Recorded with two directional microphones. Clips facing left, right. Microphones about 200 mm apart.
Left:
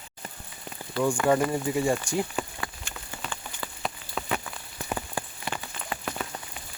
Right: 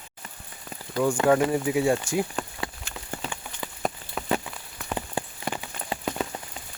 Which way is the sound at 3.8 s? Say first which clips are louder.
Right 5 dB; 50° right (ahead or behind).